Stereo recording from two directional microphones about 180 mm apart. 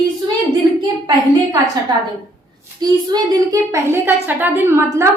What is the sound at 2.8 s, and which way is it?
A woman's voice, 20° right (ahead or behind).